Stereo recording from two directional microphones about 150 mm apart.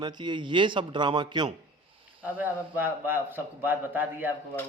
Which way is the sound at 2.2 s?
10° right (ahead or behind).